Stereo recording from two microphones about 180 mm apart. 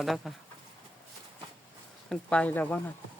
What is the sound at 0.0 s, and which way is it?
Speech, centre (ahead or behind).